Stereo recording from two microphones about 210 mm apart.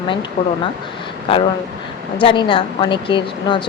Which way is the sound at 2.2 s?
25° left (ahead or behind).